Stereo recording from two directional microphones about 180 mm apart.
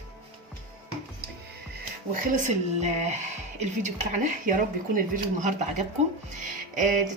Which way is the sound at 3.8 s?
45° right (ahead or behind).